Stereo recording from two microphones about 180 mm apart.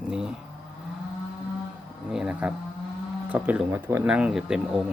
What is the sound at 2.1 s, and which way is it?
Speech, 5° right (ahead or behind).